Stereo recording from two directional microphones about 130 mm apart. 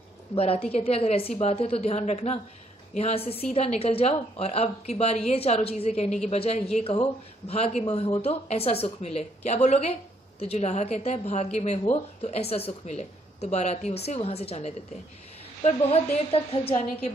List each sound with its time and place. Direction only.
0.3 s a woman's voice: 50° left (ahead or behind)